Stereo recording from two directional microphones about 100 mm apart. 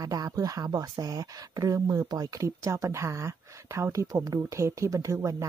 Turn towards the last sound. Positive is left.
turn(degrees=-30)  # may be behind; listen again after turning